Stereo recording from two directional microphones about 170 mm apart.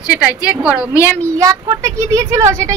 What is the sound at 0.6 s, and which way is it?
Speech, 5° right (ahead or behind).